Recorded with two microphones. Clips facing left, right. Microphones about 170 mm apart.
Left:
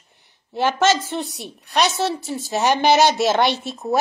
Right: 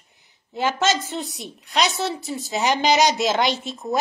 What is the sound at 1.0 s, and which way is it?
A woman's voice, 70° left (ahead or behind).